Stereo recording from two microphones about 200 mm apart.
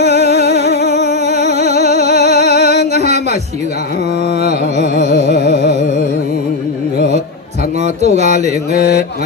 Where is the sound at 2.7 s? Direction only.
35° right (ahead or behind).